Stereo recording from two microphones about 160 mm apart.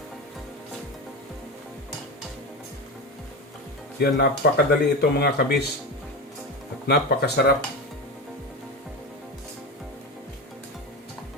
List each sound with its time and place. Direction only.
4.0 s speech: 90° left
6.8 s speech: 85° left